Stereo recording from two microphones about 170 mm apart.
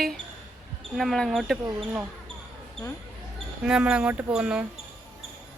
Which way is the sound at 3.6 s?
5° right (ahead or behind).